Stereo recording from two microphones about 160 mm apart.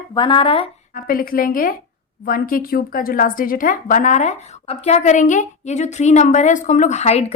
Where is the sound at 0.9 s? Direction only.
65° left (ahead or behind).